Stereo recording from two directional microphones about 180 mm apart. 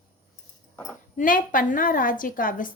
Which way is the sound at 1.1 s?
50° left (ahead or behind).